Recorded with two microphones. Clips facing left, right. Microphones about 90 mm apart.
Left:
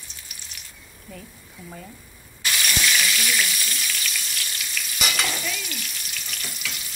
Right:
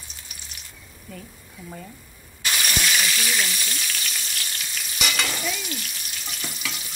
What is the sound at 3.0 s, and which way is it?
Frying, 25° right (ahead or behind).